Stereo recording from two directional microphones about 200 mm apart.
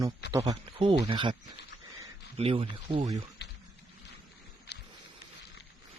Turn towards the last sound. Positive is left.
turn(degrees=55)  # may be behind; listen again after turning